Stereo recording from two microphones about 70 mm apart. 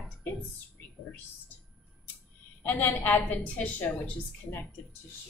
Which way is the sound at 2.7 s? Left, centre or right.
Left.